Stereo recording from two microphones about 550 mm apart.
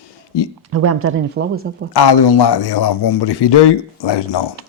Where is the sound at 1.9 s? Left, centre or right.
Left.